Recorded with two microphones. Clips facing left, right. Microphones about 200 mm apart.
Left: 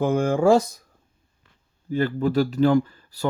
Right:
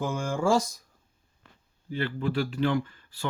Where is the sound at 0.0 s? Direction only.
60° left (ahead or behind).